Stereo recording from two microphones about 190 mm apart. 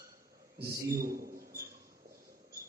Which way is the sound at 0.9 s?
50° right (ahead or behind).